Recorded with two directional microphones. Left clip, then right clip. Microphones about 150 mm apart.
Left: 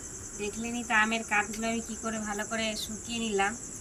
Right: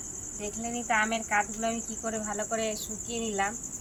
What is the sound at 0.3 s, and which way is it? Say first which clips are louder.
Speech: even; 25° right (ahead or behind).